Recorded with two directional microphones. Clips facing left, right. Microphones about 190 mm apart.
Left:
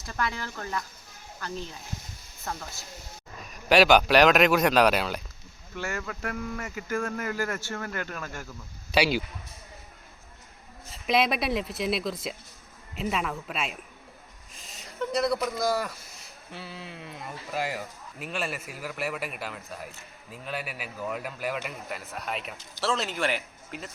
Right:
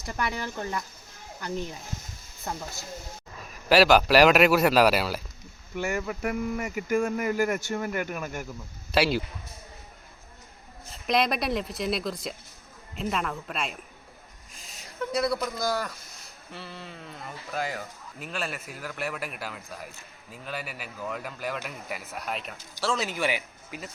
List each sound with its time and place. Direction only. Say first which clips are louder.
0.0 s speech: right 1 dB; 15° right (ahead or behind)
3.7 s speech: even; centre (ahead or behind)
5.7 s speech: right 4 dB; 15° right (ahead or behind)
8.9 s speech: even; centre (ahead or behind)
10.9 s speech: even; centre (ahead or behind)
14.5 s a sound: left 1 dB; centre (ahead or behind)
16.5 s speech: even; 5° left (ahead or behind)